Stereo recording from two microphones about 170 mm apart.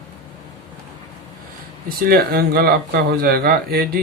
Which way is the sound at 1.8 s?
60° right (ahead or behind).